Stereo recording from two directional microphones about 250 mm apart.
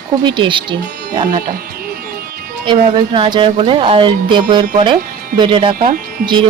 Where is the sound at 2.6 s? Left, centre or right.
Centre.